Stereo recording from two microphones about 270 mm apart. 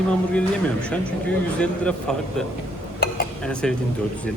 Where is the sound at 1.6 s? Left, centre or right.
Centre.